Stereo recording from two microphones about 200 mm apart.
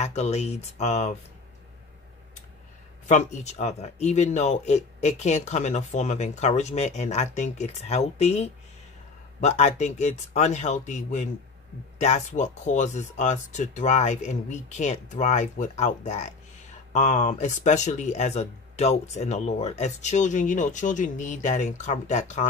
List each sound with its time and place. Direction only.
0.0 s speech: 35° left (ahead or behind)
3.1 s speech: 35° left (ahead or behind)